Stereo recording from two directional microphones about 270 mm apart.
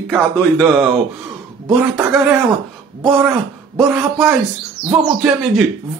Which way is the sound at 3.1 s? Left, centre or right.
Centre.